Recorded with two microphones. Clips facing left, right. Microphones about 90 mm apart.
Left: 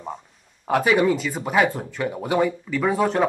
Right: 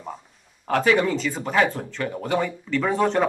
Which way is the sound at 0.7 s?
10° left (ahead or behind).